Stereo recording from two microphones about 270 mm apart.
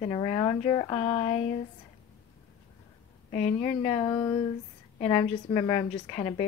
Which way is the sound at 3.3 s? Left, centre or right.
Left.